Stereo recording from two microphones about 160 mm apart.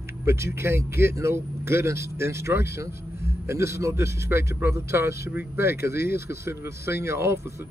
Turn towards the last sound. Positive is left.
turn(degrees=-15)  # may be behind; listen again after turning